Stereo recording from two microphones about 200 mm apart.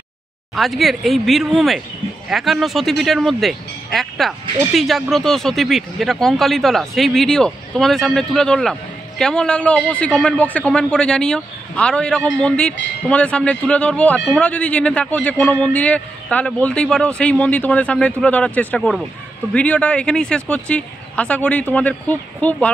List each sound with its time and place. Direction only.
0.6 s a man's voice: centre (ahead or behind)